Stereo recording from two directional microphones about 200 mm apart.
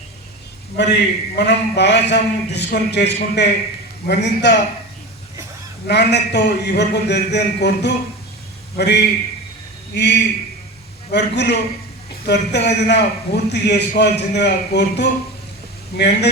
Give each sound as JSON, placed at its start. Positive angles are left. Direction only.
{"t": 0.8, "sound": "a man's voice", "side_deg": 60}
{"t": 5.9, "sound": "a man's voice", "side_deg": 55}